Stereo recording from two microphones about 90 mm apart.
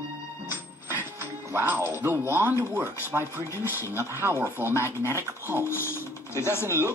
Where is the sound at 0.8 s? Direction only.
25° right (ahead or behind).